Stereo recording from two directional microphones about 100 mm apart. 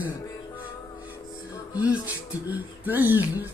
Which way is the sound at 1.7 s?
15° right (ahead or behind).